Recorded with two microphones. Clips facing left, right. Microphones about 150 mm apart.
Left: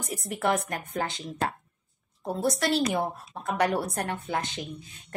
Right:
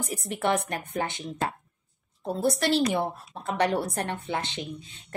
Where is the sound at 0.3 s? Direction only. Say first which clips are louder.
Even; 25° right (ahead or behind).